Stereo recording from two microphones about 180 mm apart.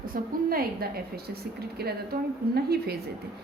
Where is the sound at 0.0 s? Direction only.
55° right (ahead or behind).